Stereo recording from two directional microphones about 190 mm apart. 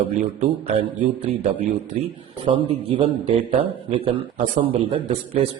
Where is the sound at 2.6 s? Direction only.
30° right (ahead or behind).